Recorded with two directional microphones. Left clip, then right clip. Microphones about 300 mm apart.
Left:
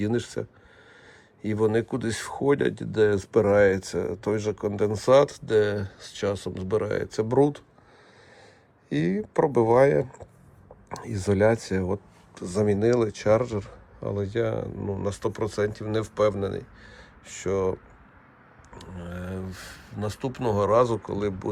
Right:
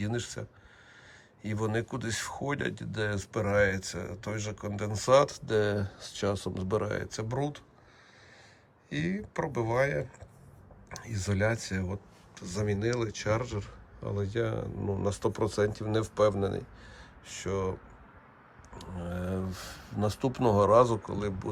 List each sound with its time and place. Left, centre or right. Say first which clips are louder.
0.0 s speech: left 8 dB; centre
8.9 s speech: left 8 dB; centre
18.7 s speech: even; centre